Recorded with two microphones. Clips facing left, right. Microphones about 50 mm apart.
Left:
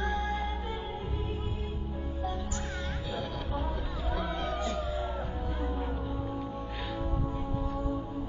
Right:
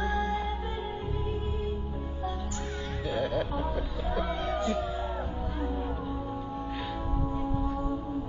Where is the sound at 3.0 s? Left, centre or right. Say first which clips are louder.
Right 11 dB; right.